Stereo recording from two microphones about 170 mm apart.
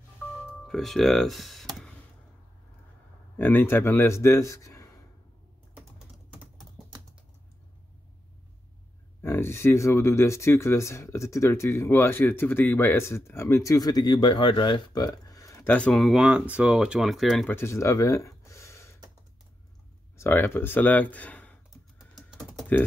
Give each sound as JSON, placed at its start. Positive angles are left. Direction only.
{"t": 0.7, "sound": "speech", "side_deg": 0}
{"t": 3.3, "sound": "speech", "side_deg": 10}
{"t": 5.8, "sound": "typing", "side_deg": -5}
{"t": 9.2, "sound": "speech", "side_deg": 15}
{"t": 17.6, "sound": "a sound", "side_deg": 15}
{"t": 20.2, "sound": "speech", "side_deg": 10}
{"t": 22.1, "sound": "typing", "side_deg": 0}